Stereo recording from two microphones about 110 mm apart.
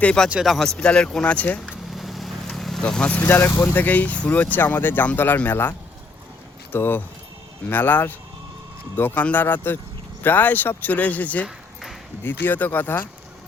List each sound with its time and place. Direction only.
0.0 s speech: 10° left (ahead or behind)
0.3 s speech: 5° right (ahead or behind); by 1.7 s 10° left (ahead or behind)
1.7 s vehicle: centre (ahead or behind); by 3.5 s 20° left (ahead or behind)
3.6 s speech: 15° left (ahead or behind)
11.4 s a sound: 5° right (ahead or behind)
12.2 s speech: 20° left (ahead or behind)